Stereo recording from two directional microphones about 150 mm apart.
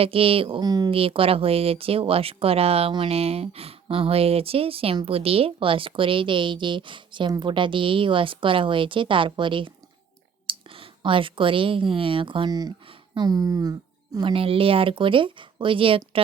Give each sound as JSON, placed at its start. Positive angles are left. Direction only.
{"t": 0.0, "sound": "speech", "side_deg": -40}
{"t": 0.9, "sound": "speech", "side_deg": -40}
{"t": 14.2, "sound": "speech", "side_deg": -35}